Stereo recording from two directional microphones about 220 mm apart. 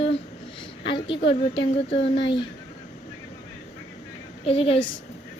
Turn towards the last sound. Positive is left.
turn(degrees=25)  # may be behind; listen again after turning